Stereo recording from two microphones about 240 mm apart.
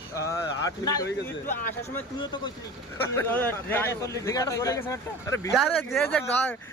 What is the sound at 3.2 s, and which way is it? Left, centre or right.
A man's voice, centre.